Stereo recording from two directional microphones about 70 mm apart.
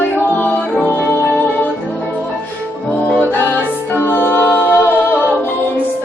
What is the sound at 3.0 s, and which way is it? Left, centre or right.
Music, left.